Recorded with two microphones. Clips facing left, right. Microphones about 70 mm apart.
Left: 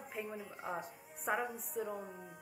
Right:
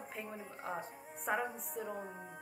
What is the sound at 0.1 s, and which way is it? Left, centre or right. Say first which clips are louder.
A woman's voice: left 5 dB; centre.